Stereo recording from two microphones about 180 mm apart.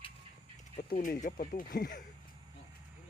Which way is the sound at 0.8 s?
50° left (ahead or behind).